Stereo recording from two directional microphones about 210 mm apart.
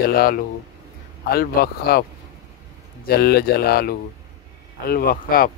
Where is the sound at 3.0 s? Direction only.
50° left (ahead or behind).